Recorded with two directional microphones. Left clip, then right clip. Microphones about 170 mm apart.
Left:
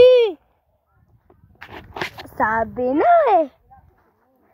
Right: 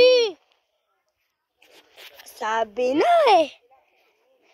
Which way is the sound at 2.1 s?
30° right (ahead or behind).